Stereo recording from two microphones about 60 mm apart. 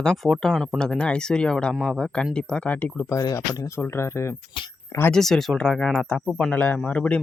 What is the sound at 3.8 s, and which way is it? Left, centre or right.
Speech, left.